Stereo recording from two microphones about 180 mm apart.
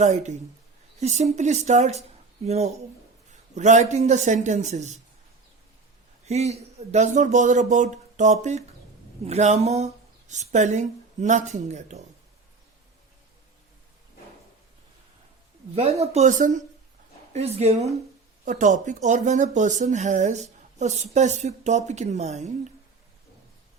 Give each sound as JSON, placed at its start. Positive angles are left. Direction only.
{"t": 0.0, "sound": "speech", "side_deg": -40}
{"t": 6.2, "sound": "speech", "side_deg": -35}
{"t": 15.7, "sound": "speech", "side_deg": -35}